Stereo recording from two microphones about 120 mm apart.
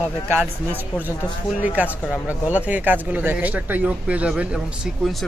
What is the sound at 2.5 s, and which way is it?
Speech, 15° right (ahead or behind).